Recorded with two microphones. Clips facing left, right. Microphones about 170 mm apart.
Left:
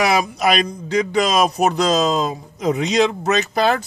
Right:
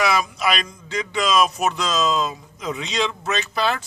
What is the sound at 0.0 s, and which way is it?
Speech, 40° left (ahead or behind).